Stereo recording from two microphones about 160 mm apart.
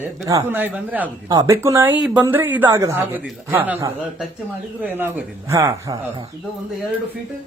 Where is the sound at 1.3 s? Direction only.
20° right (ahead or behind).